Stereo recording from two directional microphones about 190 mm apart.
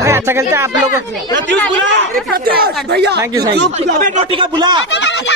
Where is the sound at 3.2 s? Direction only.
20° right (ahead or behind).